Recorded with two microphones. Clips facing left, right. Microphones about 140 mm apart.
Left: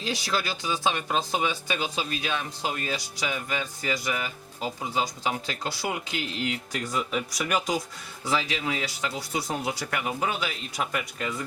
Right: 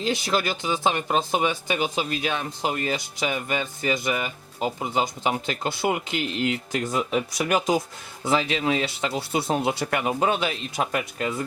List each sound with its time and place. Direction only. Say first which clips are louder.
0.0 s speech: right 5 dB; 20° right (ahead or behind)